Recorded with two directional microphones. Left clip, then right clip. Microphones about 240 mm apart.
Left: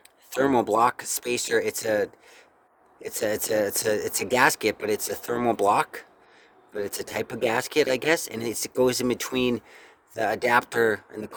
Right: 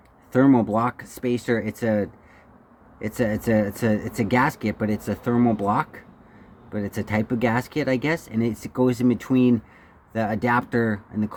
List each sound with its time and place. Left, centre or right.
0.3 s speech: left
3.1 s speech: left